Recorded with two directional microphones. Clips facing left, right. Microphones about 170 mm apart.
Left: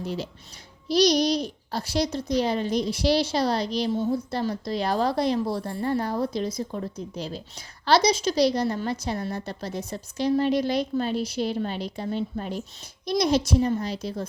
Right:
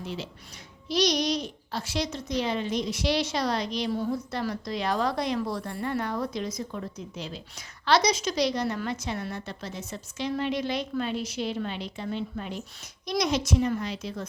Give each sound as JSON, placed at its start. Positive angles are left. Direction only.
{"t": 0.0, "sound": "a woman's voice", "side_deg": 40}